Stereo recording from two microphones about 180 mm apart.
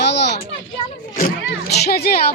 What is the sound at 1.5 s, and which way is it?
Speech, 65° left (ahead or behind).